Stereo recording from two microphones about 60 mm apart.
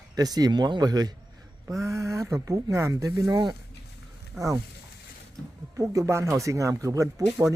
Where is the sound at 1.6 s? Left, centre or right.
Right.